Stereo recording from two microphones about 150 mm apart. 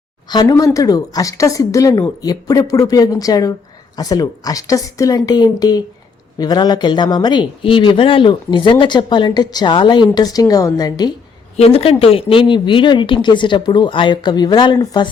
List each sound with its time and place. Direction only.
0.3 s speech: 25° left (ahead or behind)
11.5 s speech: 40° left (ahead or behind)